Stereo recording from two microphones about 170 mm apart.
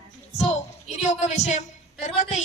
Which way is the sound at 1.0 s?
45° left (ahead or behind).